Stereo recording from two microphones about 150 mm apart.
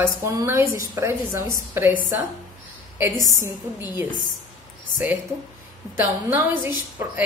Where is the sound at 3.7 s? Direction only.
15° right (ahead or behind).